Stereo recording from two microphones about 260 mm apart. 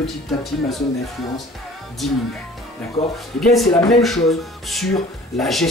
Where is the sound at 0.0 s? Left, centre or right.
Centre.